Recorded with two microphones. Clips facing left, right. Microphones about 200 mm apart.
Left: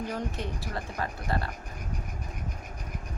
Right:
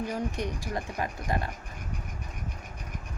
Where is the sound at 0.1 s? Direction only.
15° right (ahead or behind).